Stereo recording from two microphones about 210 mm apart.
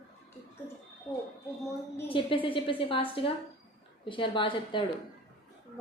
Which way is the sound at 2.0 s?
25° left (ahead or behind).